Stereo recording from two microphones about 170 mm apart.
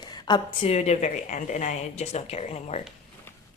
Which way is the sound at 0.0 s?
25° left (ahead or behind).